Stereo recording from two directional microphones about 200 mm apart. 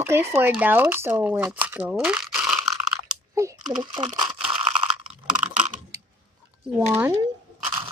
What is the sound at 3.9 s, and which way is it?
Speech, 20° right (ahead or behind).